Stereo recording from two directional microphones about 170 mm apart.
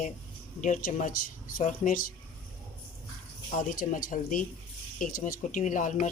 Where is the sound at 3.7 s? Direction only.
50° left (ahead or behind).